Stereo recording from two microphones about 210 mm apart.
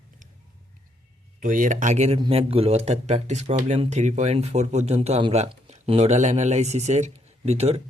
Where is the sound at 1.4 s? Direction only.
40° right (ahead or behind).